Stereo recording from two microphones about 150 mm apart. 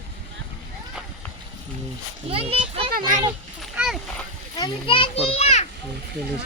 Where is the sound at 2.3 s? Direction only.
40° right (ahead or behind).